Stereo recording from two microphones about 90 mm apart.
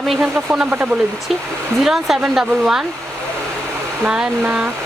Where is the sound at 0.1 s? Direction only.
10° right (ahead or behind).